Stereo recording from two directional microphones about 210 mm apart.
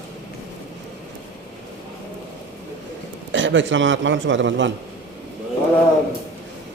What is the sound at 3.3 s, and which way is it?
A man's voice, 60° right (ahead or behind).